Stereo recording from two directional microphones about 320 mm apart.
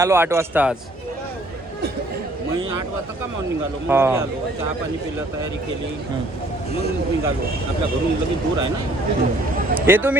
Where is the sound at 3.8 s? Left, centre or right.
Centre.